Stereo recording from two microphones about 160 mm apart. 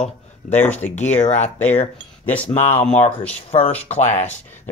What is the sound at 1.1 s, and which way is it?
Chopping, 45° left (ahead or behind).